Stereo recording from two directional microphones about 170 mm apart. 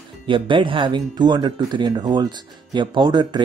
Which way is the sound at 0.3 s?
30° right (ahead or behind).